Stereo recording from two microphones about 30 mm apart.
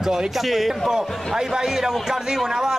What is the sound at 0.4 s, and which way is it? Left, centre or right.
A man's voice, centre.